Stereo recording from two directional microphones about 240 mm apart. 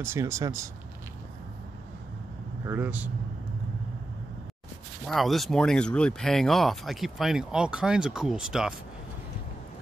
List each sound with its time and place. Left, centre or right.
0.0 s speech: centre
2.6 s speech: centre
5.0 s speech: centre